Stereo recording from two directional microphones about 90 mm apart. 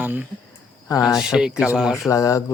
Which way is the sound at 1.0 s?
5° right (ahead or behind).